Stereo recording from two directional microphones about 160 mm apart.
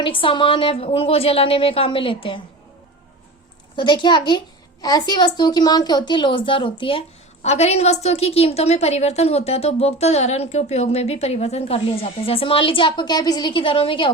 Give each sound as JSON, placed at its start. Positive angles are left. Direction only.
{"t": 0.0, "sound": "a woman's voice", "side_deg": 30}
{"t": 3.8, "sound": "a woman's voice", "side_deg": 30}